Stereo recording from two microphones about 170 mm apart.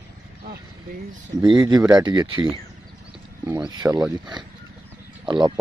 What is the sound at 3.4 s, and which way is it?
Speech, 25° right (ahead or behind).